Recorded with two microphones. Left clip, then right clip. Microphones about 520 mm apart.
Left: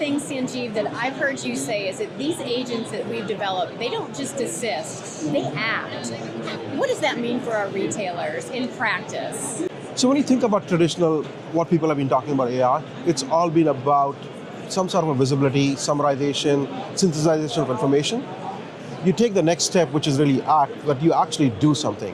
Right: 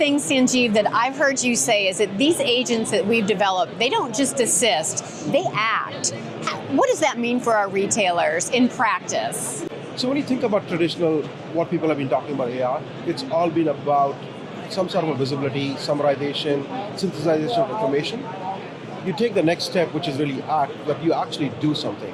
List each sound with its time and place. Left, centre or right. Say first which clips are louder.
0.0 s a woman's voice: right 6 dB; right
6.4 s a woman's voice: right 5 dB; right
10.0 s speech: left 3 dB; left
13.3 s speech: left 1 dB; left
19.1 s speech: even; left